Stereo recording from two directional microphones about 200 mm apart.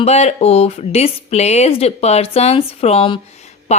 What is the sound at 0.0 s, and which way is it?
Speech, 30° left (ahead or behind).